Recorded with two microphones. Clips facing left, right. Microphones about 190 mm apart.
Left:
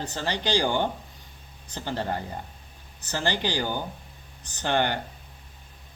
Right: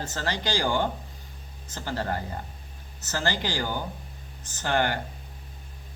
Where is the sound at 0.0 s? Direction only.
15° left (ahead or behind).